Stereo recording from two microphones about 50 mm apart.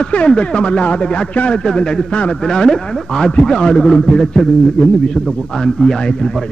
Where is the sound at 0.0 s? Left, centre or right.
Left.